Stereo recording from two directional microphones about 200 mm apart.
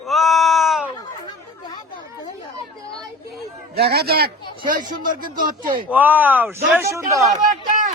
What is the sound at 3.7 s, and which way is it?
Speech, 50° right (ahead or behind).